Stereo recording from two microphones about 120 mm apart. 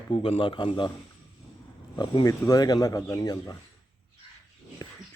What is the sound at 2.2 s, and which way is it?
Speech, 30° left (ahead or behind).